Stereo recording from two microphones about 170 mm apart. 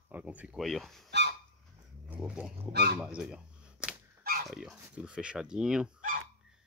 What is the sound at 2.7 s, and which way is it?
Speech, 75° right (ahead or behind).